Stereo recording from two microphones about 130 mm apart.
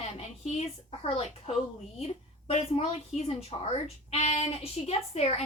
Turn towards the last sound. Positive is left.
turn(degrees=50)  # may be behind; listen again after turning